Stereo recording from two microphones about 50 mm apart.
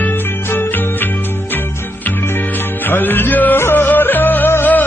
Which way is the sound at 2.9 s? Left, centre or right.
Left.